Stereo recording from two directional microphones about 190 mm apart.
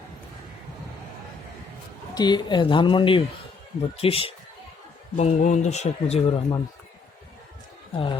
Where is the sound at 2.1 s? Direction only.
20° left (ahead or behind).